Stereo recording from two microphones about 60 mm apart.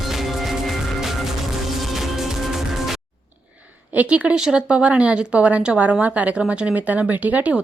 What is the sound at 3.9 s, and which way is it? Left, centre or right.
Speech, right.